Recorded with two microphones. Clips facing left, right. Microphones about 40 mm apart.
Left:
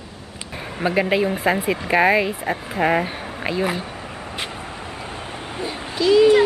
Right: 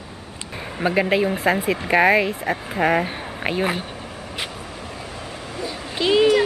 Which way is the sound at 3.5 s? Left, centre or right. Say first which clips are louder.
Even; right.